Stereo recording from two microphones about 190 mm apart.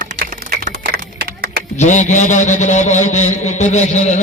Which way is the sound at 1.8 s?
40° left (ahead or behind).